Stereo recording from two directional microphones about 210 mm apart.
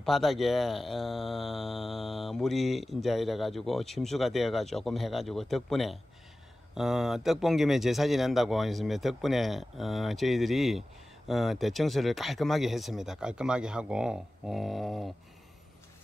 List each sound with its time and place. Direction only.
0.0 s speech: centre (ahead or behind)